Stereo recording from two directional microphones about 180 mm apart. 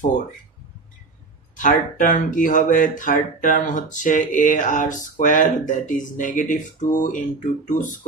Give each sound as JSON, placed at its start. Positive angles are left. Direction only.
{"t": 1.6, "sound": "speech", "side_deg": 45}